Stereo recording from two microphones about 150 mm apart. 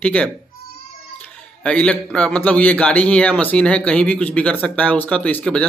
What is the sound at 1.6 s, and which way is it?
Speech, 10° left (ahead or behind).